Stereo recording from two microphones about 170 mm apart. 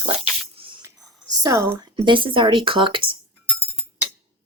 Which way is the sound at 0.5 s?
30° right (ahead or behind).